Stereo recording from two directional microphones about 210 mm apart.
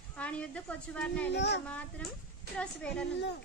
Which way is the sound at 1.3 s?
55° left (ahead or behind).